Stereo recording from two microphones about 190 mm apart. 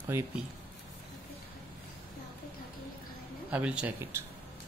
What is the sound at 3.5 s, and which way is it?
Speech, 5° right (ahead or behind).